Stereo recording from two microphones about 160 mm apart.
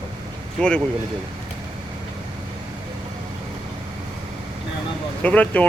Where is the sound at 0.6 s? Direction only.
5° left (ahead or behind).